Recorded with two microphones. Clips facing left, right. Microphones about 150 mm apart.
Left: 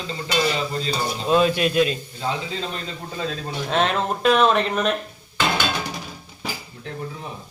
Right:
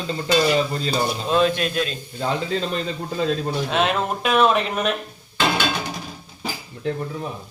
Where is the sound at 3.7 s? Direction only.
5° right (ahead or behind).